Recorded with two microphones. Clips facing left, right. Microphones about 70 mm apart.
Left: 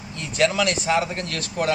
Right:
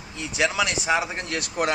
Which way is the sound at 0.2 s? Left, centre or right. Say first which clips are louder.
Left 3 dB; centre.